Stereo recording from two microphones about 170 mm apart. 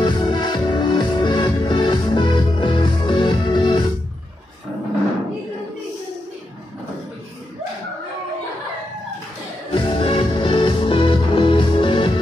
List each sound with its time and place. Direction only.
0.0 s music: 25° left (ahead or behind)
9.7 s music: 30° left (ahead or behind)